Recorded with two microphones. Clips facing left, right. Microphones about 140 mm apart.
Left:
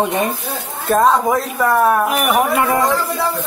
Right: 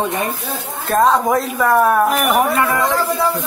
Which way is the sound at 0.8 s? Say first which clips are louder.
Left 1 dB; centre (ahead or behind).